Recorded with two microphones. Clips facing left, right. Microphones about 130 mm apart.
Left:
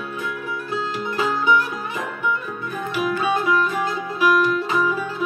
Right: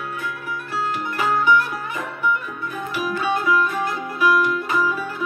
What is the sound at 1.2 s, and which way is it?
Music, 20° left (ahead or behind).